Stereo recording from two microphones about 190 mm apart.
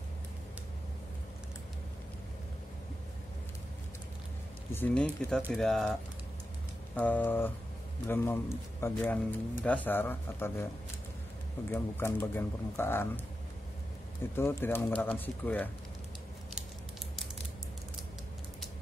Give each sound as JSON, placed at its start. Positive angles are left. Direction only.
{"t": 4.7, "sound": "speech", "side_deg": 10}
{"t": 7.0, "sound": "speech", "side_deg": 10}
{"t": 11.7, "sound": "speech", "side_deg": 10}
{"t": 14.3, "sound": "speech", "side_deg": 15}